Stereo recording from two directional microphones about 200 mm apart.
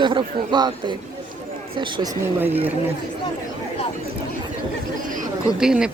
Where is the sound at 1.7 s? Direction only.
20° right (ahead or behind).